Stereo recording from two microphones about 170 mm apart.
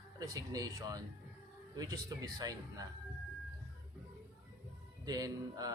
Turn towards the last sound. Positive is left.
turn(degrees=-20)  # may be behind; listen again after turning